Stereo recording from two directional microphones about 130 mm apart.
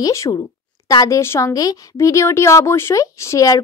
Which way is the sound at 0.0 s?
25° left (ahead or behind).